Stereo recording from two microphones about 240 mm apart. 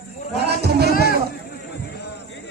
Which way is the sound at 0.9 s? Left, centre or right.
Left.